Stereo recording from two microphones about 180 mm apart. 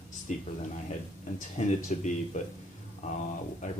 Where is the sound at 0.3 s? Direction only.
40° left (ahead or behind).